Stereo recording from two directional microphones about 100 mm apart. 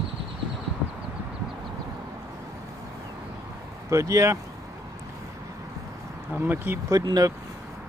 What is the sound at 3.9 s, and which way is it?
Speech, 30° right (ahead or behind).